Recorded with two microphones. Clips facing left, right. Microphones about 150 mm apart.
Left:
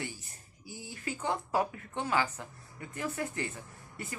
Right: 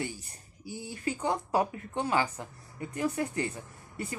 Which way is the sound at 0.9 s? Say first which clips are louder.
Right 3 dB; 15° right (ahead or behind).